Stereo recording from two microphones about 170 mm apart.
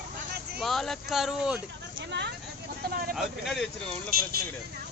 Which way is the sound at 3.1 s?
Centre (ahead or behind).